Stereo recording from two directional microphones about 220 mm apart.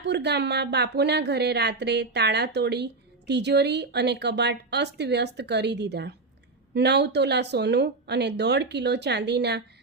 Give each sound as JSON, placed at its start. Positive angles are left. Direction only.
{"t": 0.0, "sound": "speech", "side_deg": -50}